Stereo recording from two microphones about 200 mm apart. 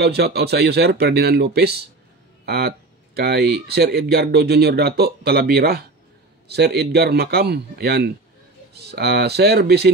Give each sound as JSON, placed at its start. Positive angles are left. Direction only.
{"t": 0.0, "sound": "speech", "side_deg": -55}